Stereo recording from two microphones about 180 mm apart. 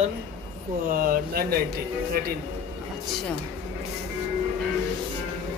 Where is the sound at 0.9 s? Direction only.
55° right (ahead or behind).